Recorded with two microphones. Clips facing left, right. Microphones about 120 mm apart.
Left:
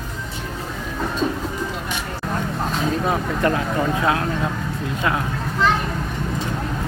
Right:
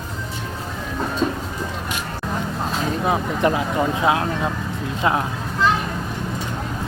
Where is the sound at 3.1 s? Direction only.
15° right (ahead or behind).